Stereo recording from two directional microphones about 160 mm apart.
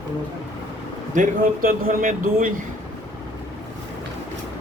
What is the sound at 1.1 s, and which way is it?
Speech, 60° right (ahead or behind).